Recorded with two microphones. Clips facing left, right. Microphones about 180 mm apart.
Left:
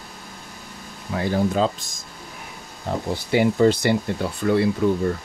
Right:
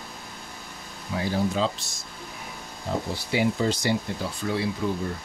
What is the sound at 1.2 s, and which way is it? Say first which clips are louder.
Speech: left 4 dB; 50° left (ahead or behind).